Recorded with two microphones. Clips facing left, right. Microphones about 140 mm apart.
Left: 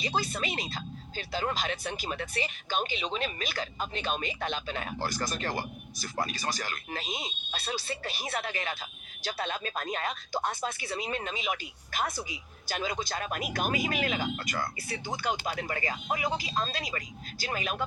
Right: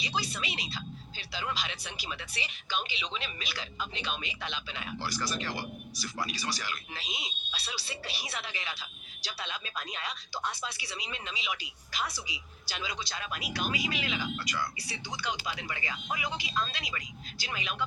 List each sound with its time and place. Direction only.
0.0 s speech: 50° left (ahead or behind)